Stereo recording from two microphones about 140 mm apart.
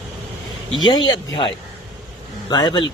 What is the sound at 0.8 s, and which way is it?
Speech, 35° left (ahead or behind).